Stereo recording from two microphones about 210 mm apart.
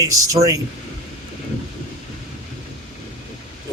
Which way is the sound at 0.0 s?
15° right (ahead or behind).